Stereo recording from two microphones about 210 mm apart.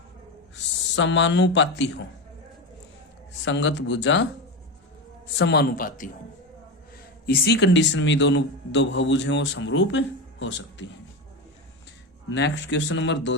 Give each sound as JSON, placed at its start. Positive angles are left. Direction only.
{"t": 0.5, "sound": "a man's voice", "side_deg": 60}
{"t": 3.4, "sound": "a man's voice", "side_deg": 60}
{"t": 5.4, "sound": "a man's voice", "side_deg": 50}
{"t": 7.3, "sound": "a man's voice", "side_deg": 50}
{"t": 12.3, "sound": "a man's voice", "side_deg": 55}